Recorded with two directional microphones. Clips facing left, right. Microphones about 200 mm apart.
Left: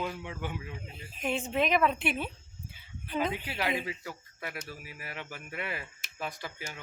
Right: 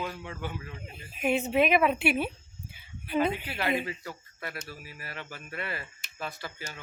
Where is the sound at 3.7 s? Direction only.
Centre (ahead or behind).